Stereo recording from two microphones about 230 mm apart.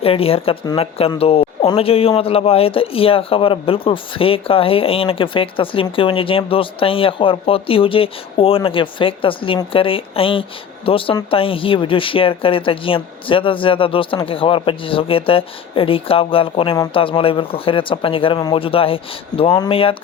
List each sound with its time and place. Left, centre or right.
0.0 s speech: left